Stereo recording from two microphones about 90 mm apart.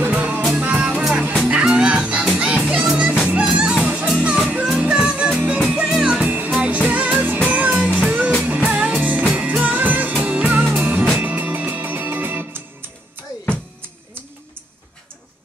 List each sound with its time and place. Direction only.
0.0 s music: 15° right (ahead or behind)
6.2 s music: 20° right (ahead or behind)